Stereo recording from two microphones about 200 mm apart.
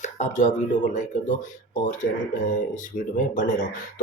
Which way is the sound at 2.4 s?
40° left (ahead or behind).